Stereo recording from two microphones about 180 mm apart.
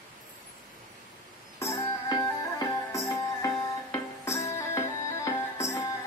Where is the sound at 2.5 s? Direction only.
15° left (ahead or behind).